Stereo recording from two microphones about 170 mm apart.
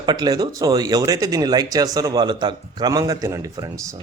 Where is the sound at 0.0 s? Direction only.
25° right (ahead or behind).